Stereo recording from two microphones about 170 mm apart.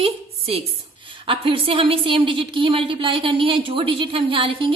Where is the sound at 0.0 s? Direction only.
35° right (ahead or behind).